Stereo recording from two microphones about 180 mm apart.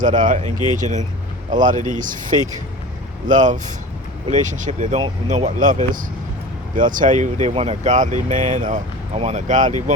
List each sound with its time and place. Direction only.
0.0 s speech: 45° right (ahead or behind)